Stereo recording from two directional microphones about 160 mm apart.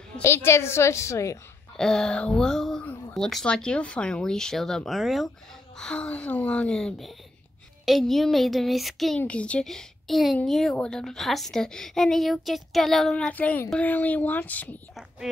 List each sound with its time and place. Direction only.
0.2 s a woman's voice: 15° left (ahead or behind)
1.8 s a woman's voice: 5° left (ahead or behind)